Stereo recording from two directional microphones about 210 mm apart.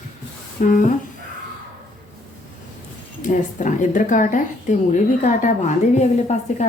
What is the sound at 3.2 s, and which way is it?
A woman's voice, 35° left (ahead or behind).